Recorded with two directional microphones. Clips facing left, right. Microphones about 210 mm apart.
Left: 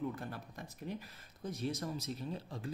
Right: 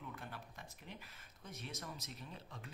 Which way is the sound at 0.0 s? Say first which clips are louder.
Left 10 dB; 40° left (ahead or behind).